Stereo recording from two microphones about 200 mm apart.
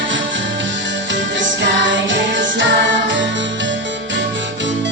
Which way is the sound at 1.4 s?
70° right (ahead or behind).